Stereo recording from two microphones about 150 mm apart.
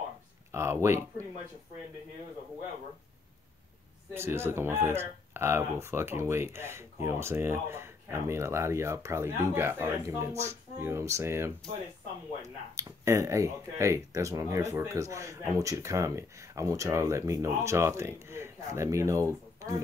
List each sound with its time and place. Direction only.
0.5 s speech: 20° right (ahead or behind)
4.1 s speech: 15° right (ahead or behind)
12.7 s speech: 20° right (ahead or behind)